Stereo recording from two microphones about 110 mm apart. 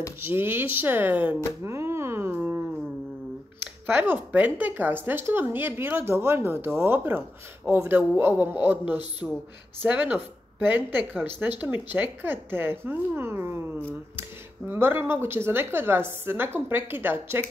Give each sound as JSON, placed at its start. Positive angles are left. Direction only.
{"t": 0.2, "sound": "speech", "side_deg": -20}
{"t": 3.8, "sound": "a woman's voice", "side_deg": -15}